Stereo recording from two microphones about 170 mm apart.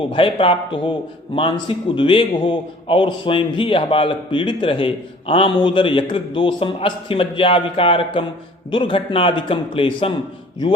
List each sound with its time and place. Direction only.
0.1 s a man's voice: 30° left (ahead or behind)